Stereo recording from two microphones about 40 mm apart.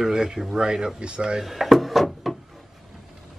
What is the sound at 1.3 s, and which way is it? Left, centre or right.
Drawer open or close, centre.